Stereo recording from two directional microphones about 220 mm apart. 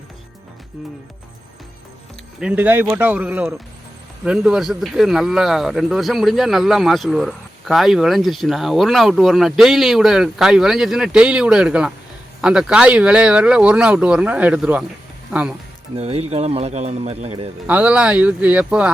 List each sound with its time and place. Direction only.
2.4 s speech: 5° right (ahead or behind)
16.0 s speech: 25° right (ahead or behind)
17.7 s speech: 5° right (ahead or behind)